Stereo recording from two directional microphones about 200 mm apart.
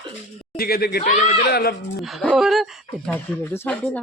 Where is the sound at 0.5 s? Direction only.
50° left (ahead or behind).